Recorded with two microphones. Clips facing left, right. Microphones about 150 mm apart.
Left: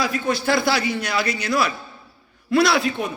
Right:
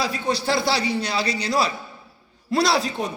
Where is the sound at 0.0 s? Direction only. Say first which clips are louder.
Left 2 dB; 30° right (ahead or behind).